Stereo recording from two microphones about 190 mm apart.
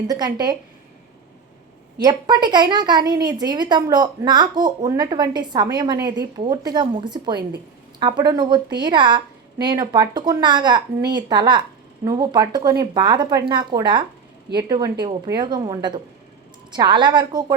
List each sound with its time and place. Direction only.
0.1 s a woman's voice: 20° right (ahead or behind)
2.0 s a woman's voice: 20° right (ahead or behind)